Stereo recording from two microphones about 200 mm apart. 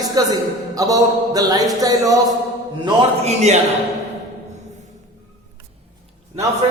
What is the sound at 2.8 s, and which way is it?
Speech, 35° right (ahead or behind).